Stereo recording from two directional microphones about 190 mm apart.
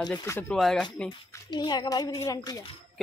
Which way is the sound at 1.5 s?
25° left (ahead or behind).